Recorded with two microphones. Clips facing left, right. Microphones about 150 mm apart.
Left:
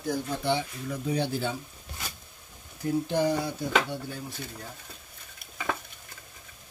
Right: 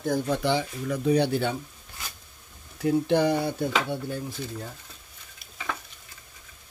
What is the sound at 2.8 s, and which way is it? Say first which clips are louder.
Speech: right 4 dB; 70° right (ahead or behind).